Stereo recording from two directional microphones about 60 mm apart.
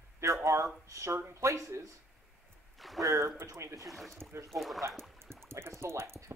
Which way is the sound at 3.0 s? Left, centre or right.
Right.